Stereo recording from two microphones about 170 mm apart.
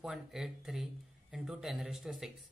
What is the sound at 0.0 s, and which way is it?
Speech, centre (ahead or behind).